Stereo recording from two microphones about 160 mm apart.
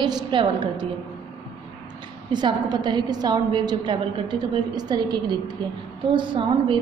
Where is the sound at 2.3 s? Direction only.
25° right (ahead or behind).